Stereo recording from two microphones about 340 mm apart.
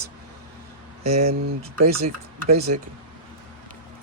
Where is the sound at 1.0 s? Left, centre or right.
Centre.